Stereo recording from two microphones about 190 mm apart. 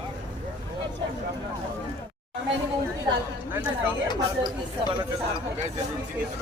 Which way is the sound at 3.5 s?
10° right (ahead or behind).